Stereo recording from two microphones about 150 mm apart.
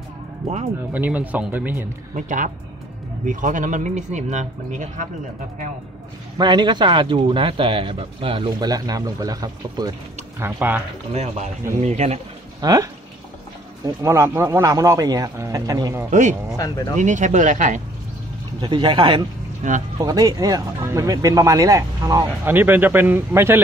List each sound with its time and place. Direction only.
0.4 s speech: centre (ahead or behind)
2.1 s speech: 60° right (ahead or behind)
6.3 s a man's voice: 30° right (ahead or behind)
10.4 s speech: 15° right (ahead or behind)
11.8 s speech: 50° right (ahead or behind)
12.5 s speech: 25° right (ahead or behind)
16.1 s speech: 55° right (ahead or behind)
16.5 s speech: 25° left (ahead or behind)
16.9 s speech: 55° right (ahead or behind)
18.6 s a man's voice: 30° right (ahead or behind)
19.6 s speech: 55° right (ahead or behind)
20.0 s speech: 25° right (ahead or behind)